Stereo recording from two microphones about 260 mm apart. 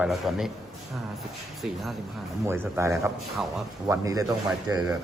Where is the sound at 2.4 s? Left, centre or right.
Centre.